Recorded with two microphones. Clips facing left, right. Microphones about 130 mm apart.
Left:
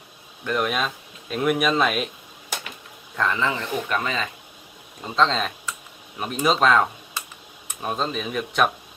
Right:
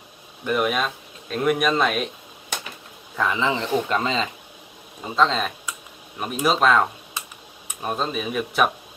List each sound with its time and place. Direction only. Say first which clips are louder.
0.4 s speech: right 2 dB; 10° right (ahead or behind)
3.2 s speech: right 1 dB; 15° right (ahead or behind)
5.0 s speech: right 1 dB; 5° right (ahead or behind)